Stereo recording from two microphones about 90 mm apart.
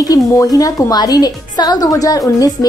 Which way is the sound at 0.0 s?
40° left (ahead or behind).